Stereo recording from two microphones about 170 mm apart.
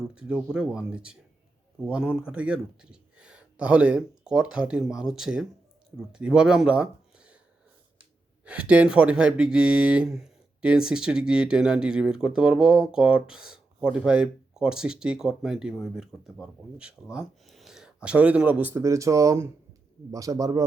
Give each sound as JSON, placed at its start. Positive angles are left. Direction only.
{"t": 0.1, "sound": "speech", "side_deg": -5}
{"t": 8.4, "sound": "a man's voice", "side_deg": -5}